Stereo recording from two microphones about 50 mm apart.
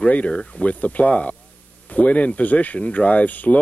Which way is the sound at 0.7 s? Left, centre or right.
Left.